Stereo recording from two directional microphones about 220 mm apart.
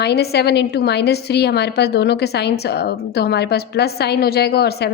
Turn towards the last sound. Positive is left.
turn(degrees=45)  # may be behind; listen again after turning